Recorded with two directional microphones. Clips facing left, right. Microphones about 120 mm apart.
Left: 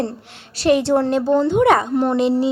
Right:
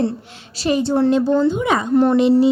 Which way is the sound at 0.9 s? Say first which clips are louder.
Right 2 dB; 45° left (ahead or behind).